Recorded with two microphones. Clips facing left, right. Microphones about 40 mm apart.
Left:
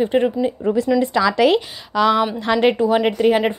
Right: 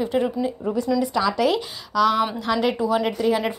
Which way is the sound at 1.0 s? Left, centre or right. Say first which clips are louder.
Left 4 dB; left.